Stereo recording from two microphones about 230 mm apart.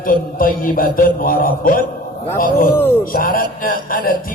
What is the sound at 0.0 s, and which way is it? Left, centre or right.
Speech, left.